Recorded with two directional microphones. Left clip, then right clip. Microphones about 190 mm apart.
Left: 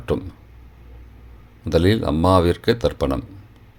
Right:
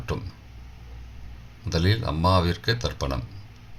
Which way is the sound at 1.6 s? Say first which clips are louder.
Left 9 dB; 45° left (ahead or behind).